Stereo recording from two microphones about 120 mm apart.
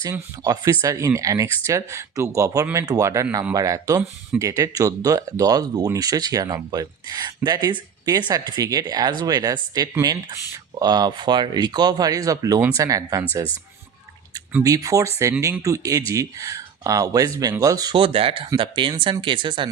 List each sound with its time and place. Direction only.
0.0 s speech: 35° right (ahead or behind)
14.6 s speech: 30° right (ahead or behind)
17.9 s speech: 50° right (ahead or behind)